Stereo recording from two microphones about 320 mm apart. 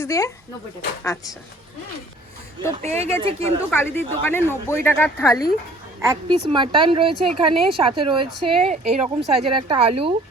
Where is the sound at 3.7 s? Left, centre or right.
Centre.